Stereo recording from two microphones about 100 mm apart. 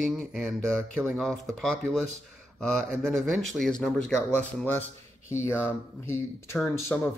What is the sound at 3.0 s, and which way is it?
Speech, 5° left (ahead or behind).